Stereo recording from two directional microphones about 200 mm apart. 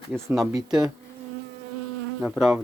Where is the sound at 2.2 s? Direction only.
Centre (ahead or behind).